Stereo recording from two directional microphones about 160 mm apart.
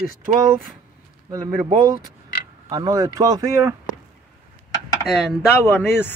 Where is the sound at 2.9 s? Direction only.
20° right (ahead or behind).